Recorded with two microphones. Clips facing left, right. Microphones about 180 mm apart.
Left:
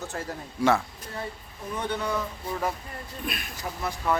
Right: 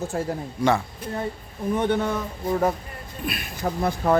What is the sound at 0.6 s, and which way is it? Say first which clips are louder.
Speech: right 1 dB; centre (ahead or behind).